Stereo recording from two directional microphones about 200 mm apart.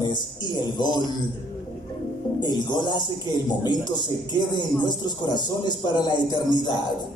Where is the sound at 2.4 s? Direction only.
20° left (ahead or behind).